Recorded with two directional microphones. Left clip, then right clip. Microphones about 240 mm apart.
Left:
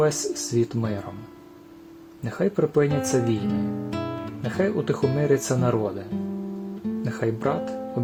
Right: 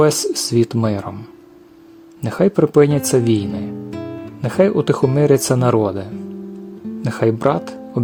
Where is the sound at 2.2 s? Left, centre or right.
Right.